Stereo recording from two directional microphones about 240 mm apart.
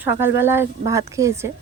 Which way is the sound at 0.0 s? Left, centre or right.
Centre.